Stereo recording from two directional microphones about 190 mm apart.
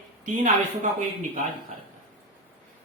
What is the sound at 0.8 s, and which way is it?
Speech, 40° right (ahead or behind).